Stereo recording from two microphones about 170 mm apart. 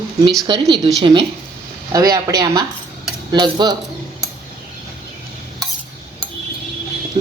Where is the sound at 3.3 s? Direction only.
25° right (ahead or behind).